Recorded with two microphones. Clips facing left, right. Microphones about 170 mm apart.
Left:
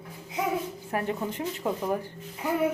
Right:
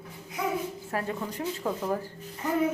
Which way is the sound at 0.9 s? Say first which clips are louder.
Left 4 dB; 20° left (ahead or behind).